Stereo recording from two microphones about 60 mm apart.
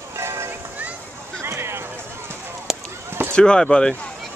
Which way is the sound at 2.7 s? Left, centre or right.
Centre.